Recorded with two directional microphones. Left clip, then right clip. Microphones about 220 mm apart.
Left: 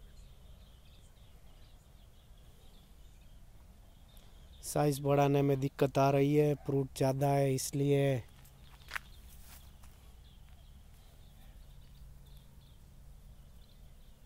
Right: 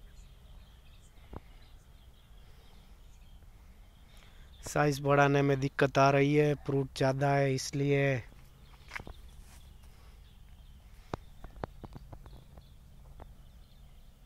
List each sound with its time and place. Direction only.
4.6 s speech: 10° left (ahead or behind)